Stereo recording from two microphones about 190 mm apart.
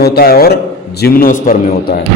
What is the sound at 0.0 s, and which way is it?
A man's voice, 55° left (ahead or behind).